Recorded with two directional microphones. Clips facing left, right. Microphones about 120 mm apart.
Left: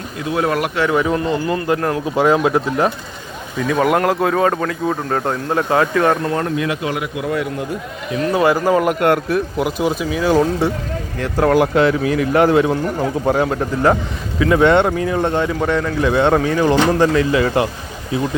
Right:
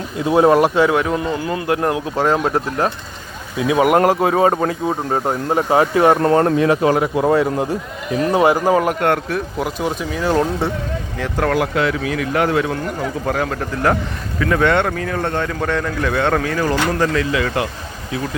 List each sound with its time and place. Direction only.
0.3 s speech: 30° right (ahead or behind)
0.9 s speech: centre (ahead or behind)
2.0 s speech: 5° left (ahead or behind)
3.6 s speech: 10° right (ahead or behind)
6.2 s speech: 40° right (ahead or behind)
8.4 s speech: 15° right (ahead or behind)
8.8 s speech: 10° left (ahead or behind)
11.5 s speech: 30° left (ahead or behind)
14.3 s speech: 10° left (ahead or behind)
14.6 s speech: 20° left (ahead or behind)
16.1 s speech: 20° left (ahead or behind)